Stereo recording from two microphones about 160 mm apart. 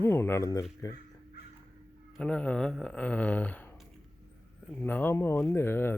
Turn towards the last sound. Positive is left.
turn(degrees=15)  # may be behind; listen again after turning